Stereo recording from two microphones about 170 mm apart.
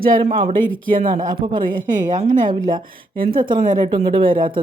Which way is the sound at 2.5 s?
25° right (ahead or behind).